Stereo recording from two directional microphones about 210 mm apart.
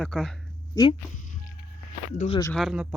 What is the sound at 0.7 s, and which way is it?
Speech, 20° left (ahead or behind).